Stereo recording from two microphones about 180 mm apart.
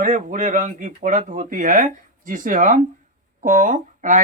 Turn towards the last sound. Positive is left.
turn(degrees=-45)  # may be behind; listen again after turning